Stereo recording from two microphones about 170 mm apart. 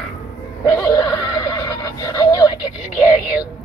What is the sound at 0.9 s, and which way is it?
Neigh, 25° left (ahead or behind).